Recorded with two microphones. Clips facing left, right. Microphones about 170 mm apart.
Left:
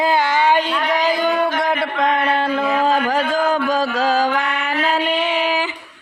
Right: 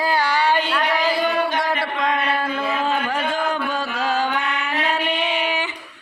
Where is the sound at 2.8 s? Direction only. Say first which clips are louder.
Left 5 dB; 40° left (ahead or behind).